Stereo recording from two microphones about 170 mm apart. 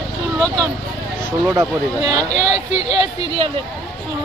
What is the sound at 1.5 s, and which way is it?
Speech, 20° right (ahead or behind).